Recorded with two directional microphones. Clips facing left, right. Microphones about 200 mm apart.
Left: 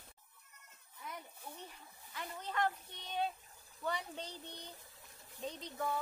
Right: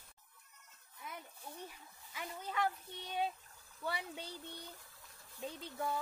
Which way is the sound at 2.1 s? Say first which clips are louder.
Even; 10° right (ahead or behind).